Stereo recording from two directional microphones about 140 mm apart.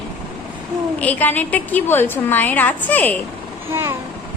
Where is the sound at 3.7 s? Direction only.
15° right (ahead or behind).